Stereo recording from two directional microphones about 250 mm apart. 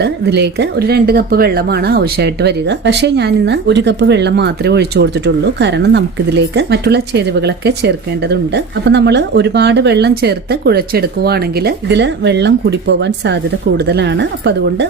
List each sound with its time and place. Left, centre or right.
0.0 s speech: right